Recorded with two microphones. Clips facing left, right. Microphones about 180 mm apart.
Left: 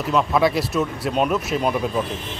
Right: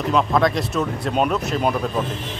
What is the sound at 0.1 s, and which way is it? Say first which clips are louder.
Speech: even; 5° left (ahead or behind).